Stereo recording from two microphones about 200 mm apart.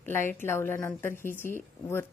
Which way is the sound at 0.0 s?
10° left (ahead or behind).